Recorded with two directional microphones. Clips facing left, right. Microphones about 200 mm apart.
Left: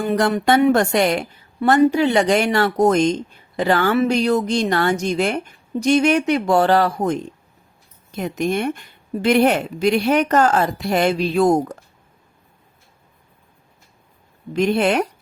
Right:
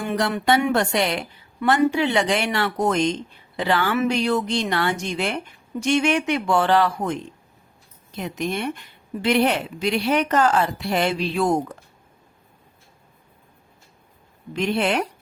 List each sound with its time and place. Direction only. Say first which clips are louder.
0.0 s speech: left 5 dB; 40° left (ahead or behind)
14.5 s speech: left 5 dB; 45° left (ahead or behind)